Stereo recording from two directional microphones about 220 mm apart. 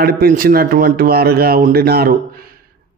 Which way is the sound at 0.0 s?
40° right (ahead or behind).